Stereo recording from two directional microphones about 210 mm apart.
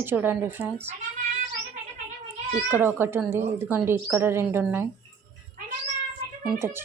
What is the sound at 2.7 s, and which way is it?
A woman's voice, 10° right (ahead or behind).